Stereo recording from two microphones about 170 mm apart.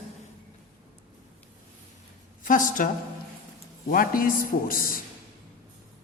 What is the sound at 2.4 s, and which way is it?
A woman's voice, 50° left (ahead or behind).